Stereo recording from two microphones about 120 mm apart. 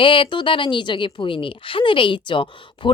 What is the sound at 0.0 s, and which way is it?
Speech, 45° left (ahead or behind).